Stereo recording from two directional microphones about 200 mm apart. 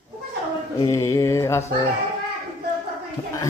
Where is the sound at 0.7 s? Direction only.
20° left (ahead or behind).